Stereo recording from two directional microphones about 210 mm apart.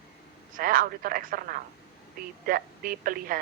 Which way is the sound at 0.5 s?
40° right (ahead or behind).